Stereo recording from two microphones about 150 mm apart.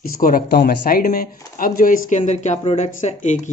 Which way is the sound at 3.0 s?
55° left (ahead or behind).